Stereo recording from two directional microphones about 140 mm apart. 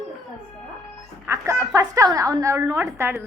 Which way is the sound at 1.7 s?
25° right (ahead or behind).